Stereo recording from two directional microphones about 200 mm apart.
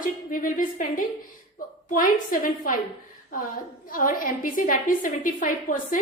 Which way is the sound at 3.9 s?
45° left (ahead or behind).